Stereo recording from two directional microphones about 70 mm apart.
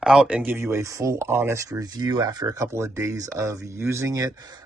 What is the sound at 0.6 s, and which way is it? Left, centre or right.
Speech, right.